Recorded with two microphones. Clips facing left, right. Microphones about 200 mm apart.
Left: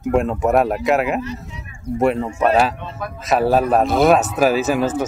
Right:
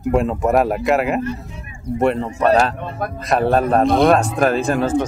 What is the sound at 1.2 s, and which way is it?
Speech, 50° right (ahead or behind).